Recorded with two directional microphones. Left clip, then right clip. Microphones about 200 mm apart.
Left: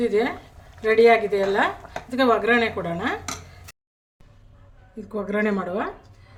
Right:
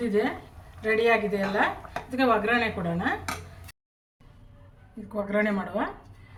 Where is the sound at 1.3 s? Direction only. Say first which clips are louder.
Left 4 dB; 50° left (ahead or behind).